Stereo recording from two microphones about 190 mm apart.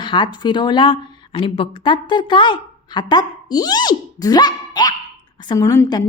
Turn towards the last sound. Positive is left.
turn(degrees=20)  # may be behind; listen again after turning